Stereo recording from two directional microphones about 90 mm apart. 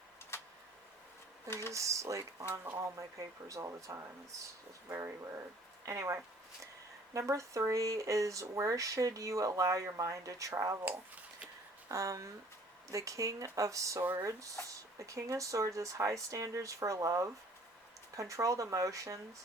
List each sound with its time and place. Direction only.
0.3 s a sound: 30° left (ahead or behind)
1.7 s speech: 35° right (ahead or behind)
10.8 s a sound: 15° right (ahead or behind)
11.9 s speech: 35° right (ahead or behind)
14.0 s speech: 25° right (ahead or behind)
14.3 s speech: 35° right (ahead or behind)